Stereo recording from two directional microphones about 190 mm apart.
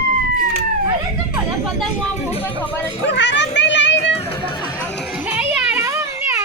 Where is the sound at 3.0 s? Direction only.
70° left (ahead or behind).